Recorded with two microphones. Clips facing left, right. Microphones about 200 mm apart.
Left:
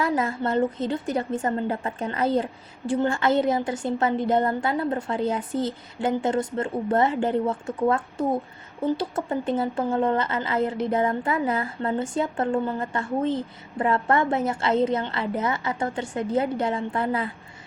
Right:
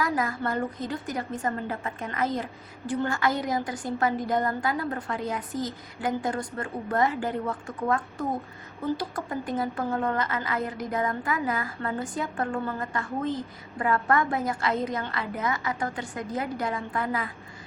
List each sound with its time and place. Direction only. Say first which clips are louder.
0.0 s a woman's voice: left 3 dB; 25° left (ahead or behind)